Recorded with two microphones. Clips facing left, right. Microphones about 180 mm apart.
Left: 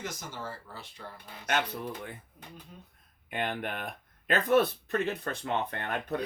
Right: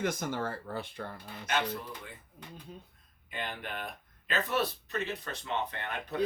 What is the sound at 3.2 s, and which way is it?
Speech, 55° left (ahead or behind).